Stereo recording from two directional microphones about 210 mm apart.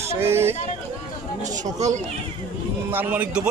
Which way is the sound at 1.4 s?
35° right (ahead or behind).